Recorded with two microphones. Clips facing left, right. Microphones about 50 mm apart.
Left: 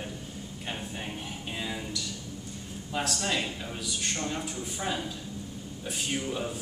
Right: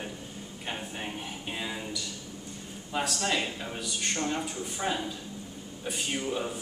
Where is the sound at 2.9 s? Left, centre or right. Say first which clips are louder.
Right 1 dB; centre.